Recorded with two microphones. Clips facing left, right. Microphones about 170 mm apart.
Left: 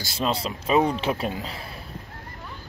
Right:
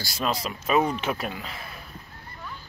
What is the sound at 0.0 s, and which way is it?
Speech, 25° left (ahead or behind).